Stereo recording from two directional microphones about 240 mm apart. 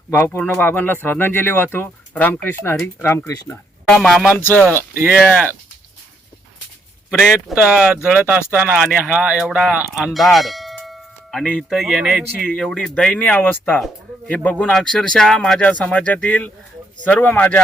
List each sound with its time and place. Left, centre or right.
0.1 s speech: centre
3.8 s speech: centre
7.1 s speech: centre